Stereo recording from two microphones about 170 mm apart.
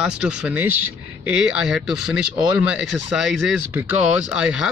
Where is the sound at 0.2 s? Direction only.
5° right (ahead or behind).